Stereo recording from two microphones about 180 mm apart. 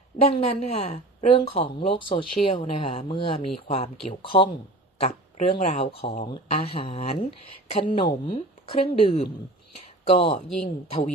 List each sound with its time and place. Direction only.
0.2 s speech: 35° left (ahead or behind)